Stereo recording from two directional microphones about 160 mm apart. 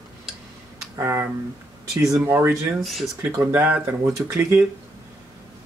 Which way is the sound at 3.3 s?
15° right (ahead or behind).